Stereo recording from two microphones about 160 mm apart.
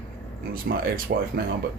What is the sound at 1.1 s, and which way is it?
Speech, 80° right.